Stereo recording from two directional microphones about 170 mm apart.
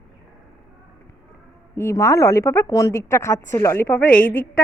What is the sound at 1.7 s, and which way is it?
A woman's voice, 15° left (ahead or behind).